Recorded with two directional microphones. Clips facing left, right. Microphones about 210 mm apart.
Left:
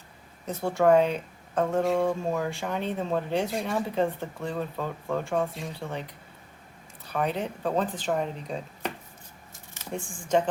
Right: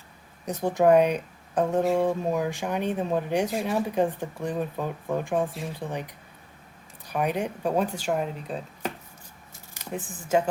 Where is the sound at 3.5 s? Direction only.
5° right (ahead or behind).